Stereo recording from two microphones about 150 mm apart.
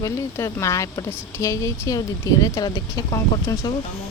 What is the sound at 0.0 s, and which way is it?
Speech, 20° left (ahead or behind).